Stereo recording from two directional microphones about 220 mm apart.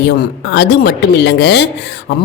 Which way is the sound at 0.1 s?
50° left (ahead or behind).